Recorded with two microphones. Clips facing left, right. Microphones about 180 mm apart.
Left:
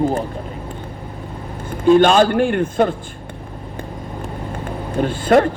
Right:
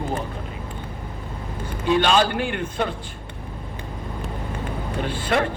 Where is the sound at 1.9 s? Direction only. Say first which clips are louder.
Left 8 dB; 45° left (ahead or behind).